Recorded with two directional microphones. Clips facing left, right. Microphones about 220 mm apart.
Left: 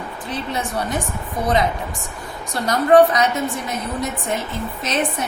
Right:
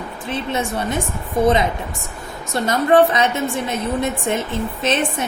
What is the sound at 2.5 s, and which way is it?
A woman's voice, 25° right (ahead or behind).